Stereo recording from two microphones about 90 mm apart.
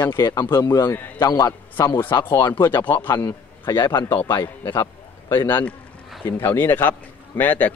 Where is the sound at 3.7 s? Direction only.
55° left (ahead or behind).